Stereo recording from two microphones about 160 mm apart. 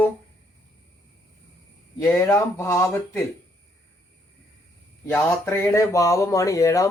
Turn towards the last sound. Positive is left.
turn(degrees=20)  # may be behind; listen again after turning